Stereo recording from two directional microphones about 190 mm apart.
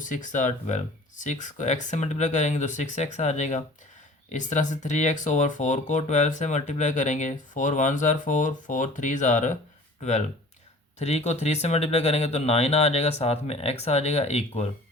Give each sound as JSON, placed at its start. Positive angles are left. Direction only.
{"t": 0.0, "sound": "speech", "side_deg": 40}